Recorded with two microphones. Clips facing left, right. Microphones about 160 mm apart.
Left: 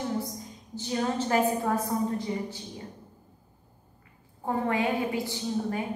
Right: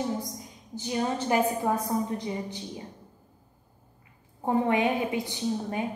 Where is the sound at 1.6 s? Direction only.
20° right (ahead or behind).